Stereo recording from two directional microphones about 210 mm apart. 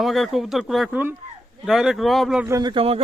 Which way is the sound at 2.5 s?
20° right (ahead or behind).